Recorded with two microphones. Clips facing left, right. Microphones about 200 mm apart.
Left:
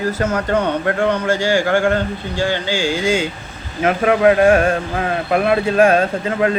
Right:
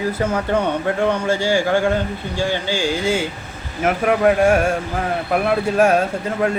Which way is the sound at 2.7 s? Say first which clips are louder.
Left 2 dB; 15° left (ahead or behind).